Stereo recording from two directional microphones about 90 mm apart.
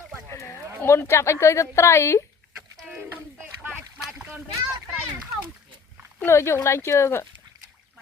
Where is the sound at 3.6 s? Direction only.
10° right (ahead or behind).